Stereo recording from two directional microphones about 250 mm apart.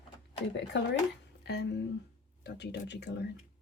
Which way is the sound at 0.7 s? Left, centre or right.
Left.